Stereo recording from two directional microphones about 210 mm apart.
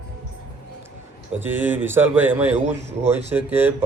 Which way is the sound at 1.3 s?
10° right (ahead or behind).